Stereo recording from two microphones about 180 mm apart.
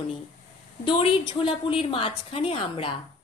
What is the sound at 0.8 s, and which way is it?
A woman's voice, 30° left (ahead or behind).